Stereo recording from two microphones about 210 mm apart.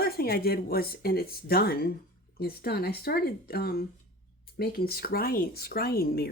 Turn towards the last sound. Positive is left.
turn(degrees=45)  # may be behind; listen again after turning